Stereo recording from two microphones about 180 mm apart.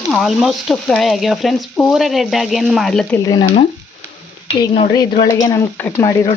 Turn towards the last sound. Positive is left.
turn(degrees=15)  # may be behind; listen again after turning